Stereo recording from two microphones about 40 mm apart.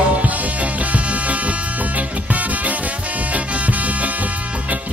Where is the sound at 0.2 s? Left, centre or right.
Right.